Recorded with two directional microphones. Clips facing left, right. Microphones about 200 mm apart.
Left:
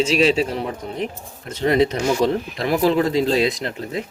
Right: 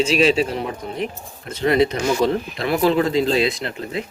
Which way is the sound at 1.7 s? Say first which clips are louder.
Even; 40° left (ahead or behind).